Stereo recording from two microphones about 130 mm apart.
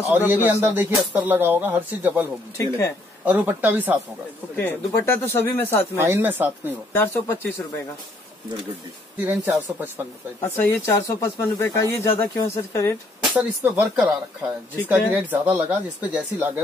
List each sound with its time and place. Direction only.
0.0 s speech: 15° right (ahead or behind)
3.3 s speech: 15° right (ahead or behind)
4.6 s speech: 15° left (ahead or behind)
5.9 s speech: 20° right (ahead or behind)
6.9 s speech: 15° left (ahead or behind)
9.2 s speech: 15° right (ahead or behind)
10.4 s speech: 20° left (ahead or behind)
13.3 s speech: 10° right (ahead or behind)